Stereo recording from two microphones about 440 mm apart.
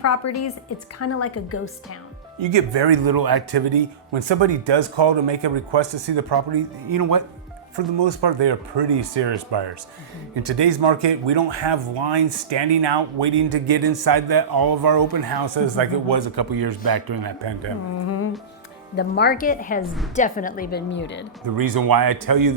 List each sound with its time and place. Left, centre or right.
0.0 s a woman's voice: left
2.4 s speech: right
7.8 s speech: right
18.0 s a woman's voice: left
18.9 s speech: left
19.8 s a woman's voice: centre
20.1 s speech: centre
21.4 s a man's voice: right